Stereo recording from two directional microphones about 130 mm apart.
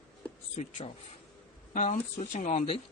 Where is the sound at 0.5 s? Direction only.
60° left (ahead or behind); by 2.6 s 80° left.